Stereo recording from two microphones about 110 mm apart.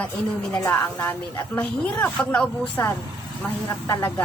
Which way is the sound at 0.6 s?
20° left (ahead or behind).